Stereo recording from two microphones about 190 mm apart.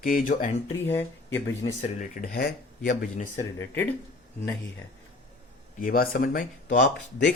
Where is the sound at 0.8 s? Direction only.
10° left (ahead or behind).